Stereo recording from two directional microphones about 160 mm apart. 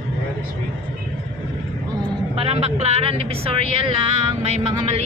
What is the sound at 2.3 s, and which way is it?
A woman's voice, 40° right (ahead or behind).